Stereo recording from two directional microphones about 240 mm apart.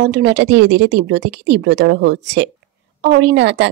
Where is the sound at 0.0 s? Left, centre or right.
Right.